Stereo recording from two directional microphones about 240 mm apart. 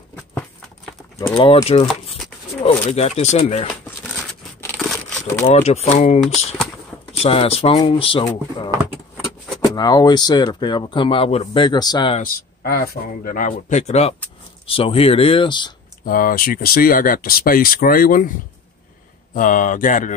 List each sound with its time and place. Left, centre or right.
1.3 s speech: left
4.1 s scissors: centre
5.2 s speech: left
9.8 s speech: centre
12.2 s speech: left; by 15.7 s centre
16.1 s speech: left
19.3 s speech: left